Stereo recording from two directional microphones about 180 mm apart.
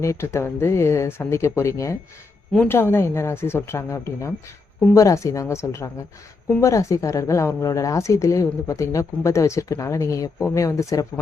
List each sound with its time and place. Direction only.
0.0 s speech: 15° left (ahead or behind)